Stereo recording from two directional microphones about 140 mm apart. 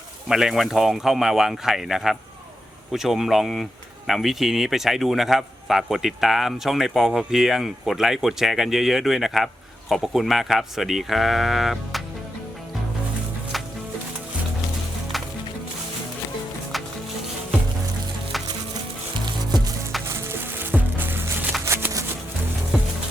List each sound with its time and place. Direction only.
0.3 s speech: 5° right (ahead or behind)
20.1 s music: 15° right (ahead or behind)
21.6 s a sound: 15° right (ahead or behind)
22.7 s music: 5° right (ahead or behind)